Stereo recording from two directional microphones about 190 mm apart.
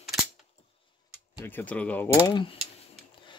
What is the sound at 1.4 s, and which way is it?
Speech, 10° left (ahead or behind).